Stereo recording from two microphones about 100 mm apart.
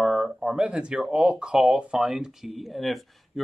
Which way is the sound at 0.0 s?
5° right (ahead or behind).